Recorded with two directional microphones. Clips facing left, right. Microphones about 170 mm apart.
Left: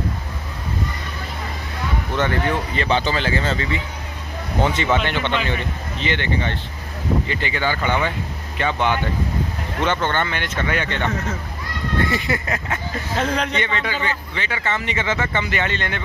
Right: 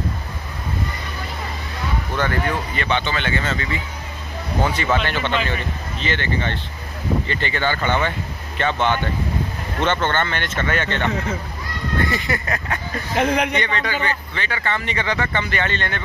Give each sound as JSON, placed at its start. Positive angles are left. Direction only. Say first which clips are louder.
{"t": 2.1, "sound": "speech", "louder": "left 2 dB", "side_deg": 25}
{"t": 12.1, "sound": "speech", "louder": "left 1 dB", "side_deg": 20}
{"t": 13.1, "sound": "speech", "louder": "right 3 dB", "side_deg": -15}
{"t": 13.6, "sound": "speech", "louder": "right 1 dB", "side_deg": 20}